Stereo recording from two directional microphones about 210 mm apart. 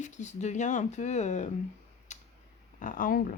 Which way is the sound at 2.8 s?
40° left (ahead or behind).